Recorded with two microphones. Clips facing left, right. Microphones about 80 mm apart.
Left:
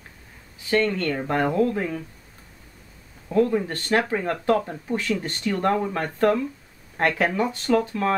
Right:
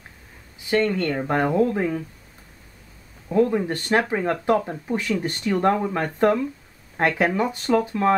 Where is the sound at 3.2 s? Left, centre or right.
Centre.